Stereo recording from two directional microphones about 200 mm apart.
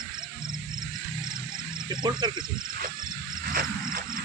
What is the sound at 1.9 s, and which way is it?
Speech, 20° right (ahead or behind).